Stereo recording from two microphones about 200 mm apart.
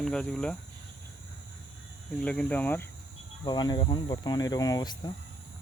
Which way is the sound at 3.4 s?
20° left (ahead or behind).